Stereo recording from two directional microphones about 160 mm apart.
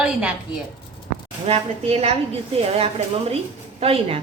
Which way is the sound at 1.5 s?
40° right (ahead or behind).